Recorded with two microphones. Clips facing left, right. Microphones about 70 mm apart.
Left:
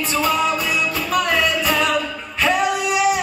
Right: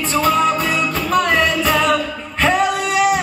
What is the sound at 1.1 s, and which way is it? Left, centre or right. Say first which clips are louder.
Music: right 3 dB; right.